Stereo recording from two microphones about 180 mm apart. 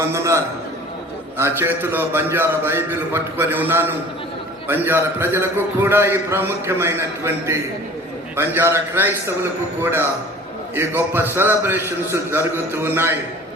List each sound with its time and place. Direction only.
0.0 s a man's voice: 15° right (ahead or behind)